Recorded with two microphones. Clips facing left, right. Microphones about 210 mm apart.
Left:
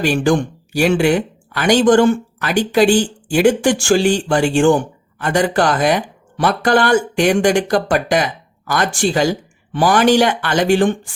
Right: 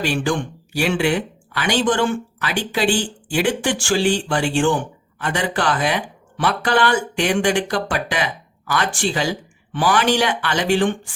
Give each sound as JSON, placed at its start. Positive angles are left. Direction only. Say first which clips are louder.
{"t": 0.0, "sound": "speech", "louder": "left 6 dB", "side_deg": 45}